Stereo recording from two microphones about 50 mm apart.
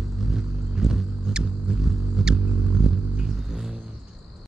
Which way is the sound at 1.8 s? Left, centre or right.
Centre.